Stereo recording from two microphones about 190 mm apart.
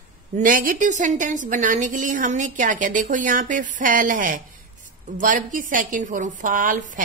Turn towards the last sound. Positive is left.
turn(degrees=-45)  # may be behind; listen again after turning